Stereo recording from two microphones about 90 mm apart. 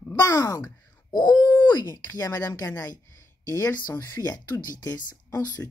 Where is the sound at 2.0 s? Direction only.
40° left (ahead or behind).